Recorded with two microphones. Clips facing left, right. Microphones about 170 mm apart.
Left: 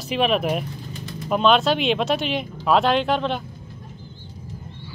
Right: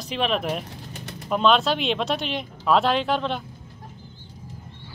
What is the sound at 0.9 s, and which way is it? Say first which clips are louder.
Bird: left 2 dB; 75° right (ahead or behind).